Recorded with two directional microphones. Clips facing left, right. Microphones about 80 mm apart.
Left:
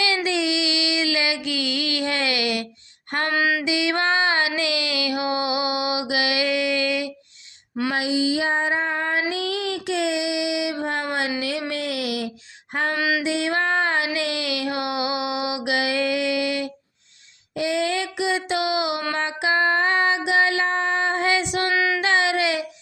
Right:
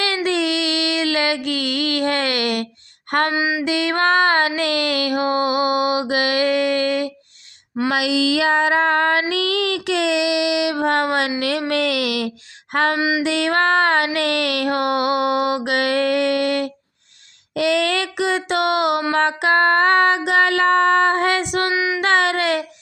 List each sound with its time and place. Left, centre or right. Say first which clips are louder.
0.3 s child singing: right 3 dB; right
3.3 s music: right 1 dB; centre
3.6 s a sound: right 3 dB; right
7.9 s female singing: right 4 dB; right
9.3 s music: right 5 dB; right
11.7 s speech: right 6 dB; right
13.0 s mantra: right 3 dB; right
13.2 s a sound: right 5 dB; right
17.5 s music: right 4 dB; right
21.7 s child singing: right 1 dB; centre
22.0 s a sound: right 3 dB; right